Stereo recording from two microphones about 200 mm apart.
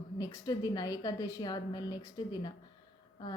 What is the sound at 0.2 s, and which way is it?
Speech, 20° left (ahead or behind).